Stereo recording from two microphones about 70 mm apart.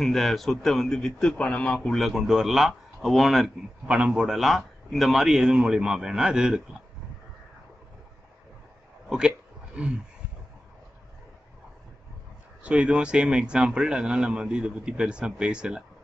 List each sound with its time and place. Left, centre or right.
0.0 s speech: centre
1.4 s a man's voice: centre
2.0 s speech: centre
3.8 s a man's voice: centre
4.1 s a man's voice: centre
9.8 s a man's voice: centre
12.6 s a man's voice: centre